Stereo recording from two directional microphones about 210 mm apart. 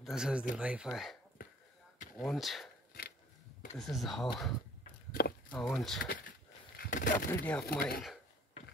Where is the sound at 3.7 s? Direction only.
Centre (ahead or behind).